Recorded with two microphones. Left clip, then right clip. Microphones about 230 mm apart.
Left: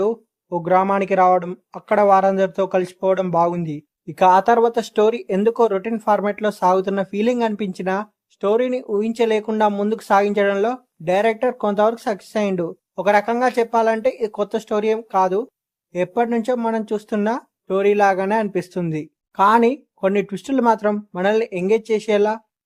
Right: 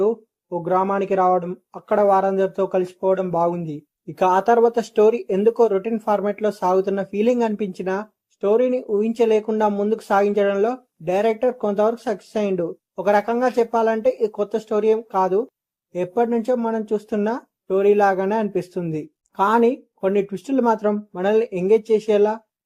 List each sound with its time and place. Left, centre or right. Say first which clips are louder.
0.0 s speech: even; left